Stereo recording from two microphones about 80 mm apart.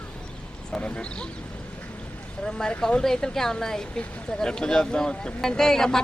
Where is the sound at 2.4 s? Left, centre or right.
Centre.